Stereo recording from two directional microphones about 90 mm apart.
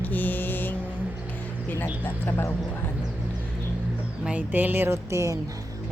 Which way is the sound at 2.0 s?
25° left (ahead or behind).